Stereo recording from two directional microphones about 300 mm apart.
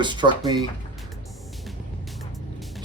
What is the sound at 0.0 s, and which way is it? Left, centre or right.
Speech, centre.